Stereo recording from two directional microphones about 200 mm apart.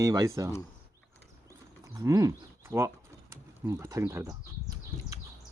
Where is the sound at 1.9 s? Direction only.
15° right (ahead or behind).